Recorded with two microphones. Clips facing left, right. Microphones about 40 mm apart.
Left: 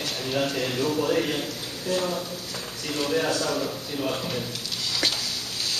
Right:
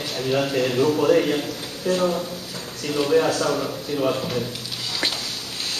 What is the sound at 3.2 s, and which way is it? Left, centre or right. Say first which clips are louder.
Speech: right 5 dB; right.